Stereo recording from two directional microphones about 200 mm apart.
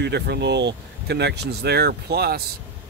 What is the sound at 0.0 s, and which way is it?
Speech, 55° right (ahead or behind).